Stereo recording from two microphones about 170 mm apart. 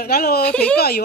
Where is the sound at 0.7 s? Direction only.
65° left (ahead or behind).